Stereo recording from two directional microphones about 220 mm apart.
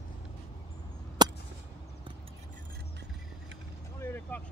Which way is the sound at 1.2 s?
20° right (ahead or behind).